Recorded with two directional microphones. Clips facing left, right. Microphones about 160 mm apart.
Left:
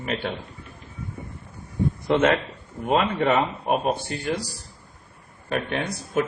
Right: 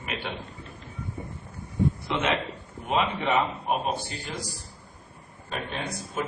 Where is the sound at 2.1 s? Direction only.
55° left (ahead or behind).